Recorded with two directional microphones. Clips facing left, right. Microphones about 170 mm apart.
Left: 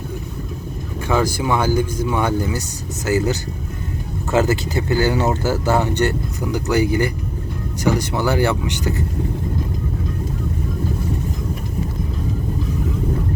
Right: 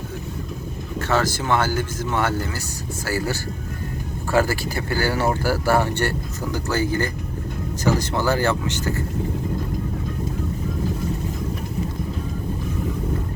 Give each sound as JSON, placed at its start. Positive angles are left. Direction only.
{"t": 1.0, "sound": "speech", "side_deg": 10}